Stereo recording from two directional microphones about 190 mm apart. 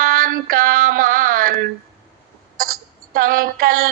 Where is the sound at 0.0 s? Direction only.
50° right (ahead or behind).